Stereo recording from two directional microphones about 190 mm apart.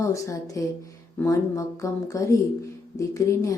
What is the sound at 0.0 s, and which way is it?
A woman's voice, 15° left (ahead or behind).